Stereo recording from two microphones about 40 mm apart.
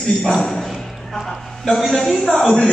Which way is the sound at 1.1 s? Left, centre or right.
Centre.